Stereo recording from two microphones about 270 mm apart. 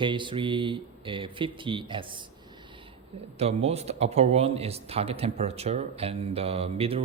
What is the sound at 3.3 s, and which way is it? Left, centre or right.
Speech, right.